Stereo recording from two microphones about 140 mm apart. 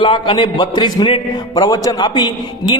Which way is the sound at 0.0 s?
35° left (ahead or behind).